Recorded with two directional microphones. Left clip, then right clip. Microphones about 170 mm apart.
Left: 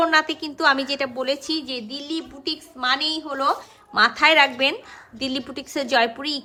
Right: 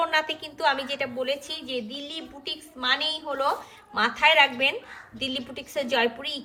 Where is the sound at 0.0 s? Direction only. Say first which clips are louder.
Left 6 dB; 40° left (ahead or behind).